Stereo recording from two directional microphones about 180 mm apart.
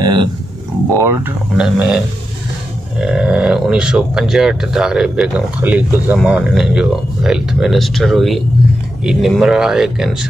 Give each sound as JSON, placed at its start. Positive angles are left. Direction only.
{"t": 0.0, "sound": "grunt", "side_deg": -25}
{"t": 0.9, "sound": "speech", "side_deg": -15}
{"t": 3.0, "sound": "speech", "side_deg": -5}